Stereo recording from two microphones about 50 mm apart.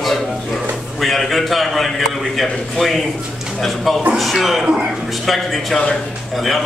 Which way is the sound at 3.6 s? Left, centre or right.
Centre.